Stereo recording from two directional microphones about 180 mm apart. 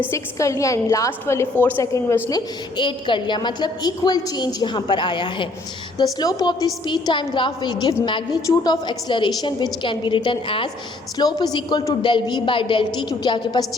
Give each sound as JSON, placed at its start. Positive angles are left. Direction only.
{"t": 0.1, "sound": "a woman's voice", "side_deg": 15}
{"t": 2.7, "sound": "a woman's voice", "side_deg": 25}